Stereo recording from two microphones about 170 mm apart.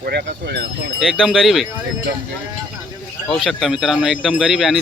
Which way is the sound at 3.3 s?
Centre (ahead or behind).